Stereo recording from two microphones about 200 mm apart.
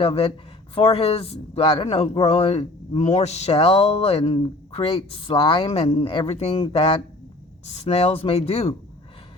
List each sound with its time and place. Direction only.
0.0 s speech: 30° left (ahead or behind)